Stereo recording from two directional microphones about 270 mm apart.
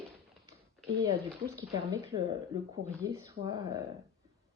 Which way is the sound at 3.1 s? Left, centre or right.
Centre.